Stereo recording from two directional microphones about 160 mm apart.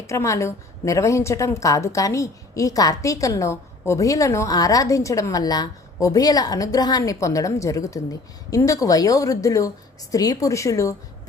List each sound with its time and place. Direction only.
0.1 s a woman's voice: 20° left (ahead or behind)